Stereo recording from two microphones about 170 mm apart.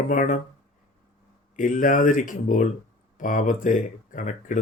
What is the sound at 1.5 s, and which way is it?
Speech, 50° left (ahead or behind).